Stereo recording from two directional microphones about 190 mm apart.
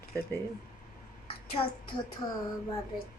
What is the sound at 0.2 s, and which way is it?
Speech, 10° left (ahead or behind).